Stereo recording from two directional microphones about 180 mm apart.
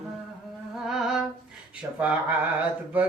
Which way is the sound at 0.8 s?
Centre (ahead or behind).